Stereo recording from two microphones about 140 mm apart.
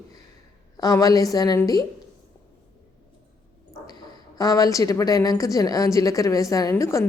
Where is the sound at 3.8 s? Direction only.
30° left (ahead or behind).